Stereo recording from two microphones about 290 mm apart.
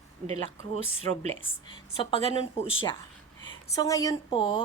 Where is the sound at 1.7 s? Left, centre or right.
Centre.